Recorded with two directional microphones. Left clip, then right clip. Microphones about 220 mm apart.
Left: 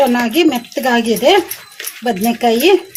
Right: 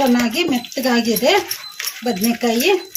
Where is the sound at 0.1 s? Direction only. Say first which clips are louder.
Left 4 dB; 45° left (ahead or behind).